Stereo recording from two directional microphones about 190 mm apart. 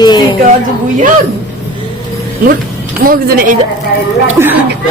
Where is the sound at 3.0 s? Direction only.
50° right (ahead or behind).